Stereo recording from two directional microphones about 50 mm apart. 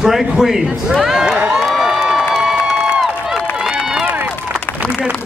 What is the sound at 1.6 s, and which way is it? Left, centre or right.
Crowd, centre.